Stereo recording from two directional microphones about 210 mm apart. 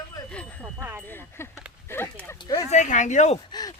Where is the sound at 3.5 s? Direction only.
20° left (ahead or behind).